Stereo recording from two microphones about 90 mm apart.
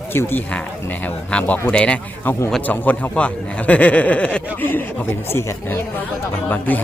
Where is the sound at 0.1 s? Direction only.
25° left (ahead or behind).